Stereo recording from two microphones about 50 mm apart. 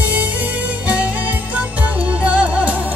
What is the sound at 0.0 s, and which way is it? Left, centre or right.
Music, right.